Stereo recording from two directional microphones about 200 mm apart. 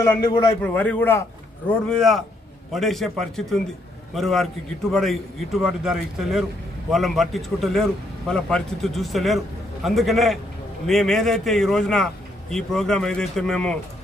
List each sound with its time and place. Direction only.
0.0 s a man's voice: 20° left (ahead or behind)
0.6 s a man's voice: 10° left (ahead or behind)